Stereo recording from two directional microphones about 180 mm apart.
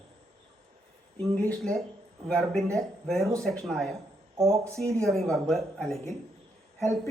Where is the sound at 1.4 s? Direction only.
5° left (ahead or behind).